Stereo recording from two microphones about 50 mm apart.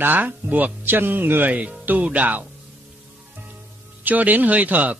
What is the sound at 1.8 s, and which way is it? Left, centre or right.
Speech, right.